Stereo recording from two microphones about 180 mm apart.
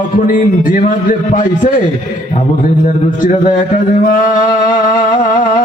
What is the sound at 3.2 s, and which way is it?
Speech, 50° left (ahead or behind).